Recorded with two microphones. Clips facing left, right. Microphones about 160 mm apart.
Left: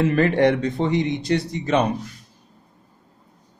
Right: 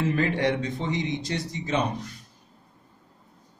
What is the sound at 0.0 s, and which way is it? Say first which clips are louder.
Speech: left 7 dB; 65° left (ahead or behind).